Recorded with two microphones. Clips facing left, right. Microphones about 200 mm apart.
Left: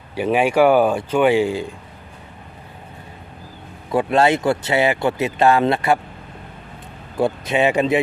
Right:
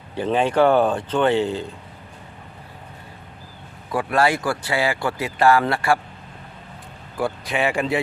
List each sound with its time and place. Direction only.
0.1 s speech: 10° left (ahead or behind)
3.9 s speech: 25° left (ahead or behind)
7.2 s speech: 20° left (ahead or behind)